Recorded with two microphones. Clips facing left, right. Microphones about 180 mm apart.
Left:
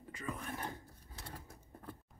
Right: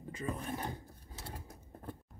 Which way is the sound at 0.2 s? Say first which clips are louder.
Right 4 dB; 30° right (ahead or behind).